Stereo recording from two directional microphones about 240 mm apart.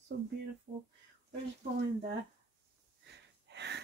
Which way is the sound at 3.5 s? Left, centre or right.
Right.